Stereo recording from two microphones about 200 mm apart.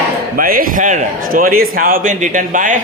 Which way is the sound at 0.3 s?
45° right (ahead or behind).